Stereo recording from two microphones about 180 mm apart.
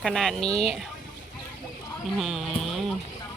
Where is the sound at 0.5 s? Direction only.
35° left (ahead or behind).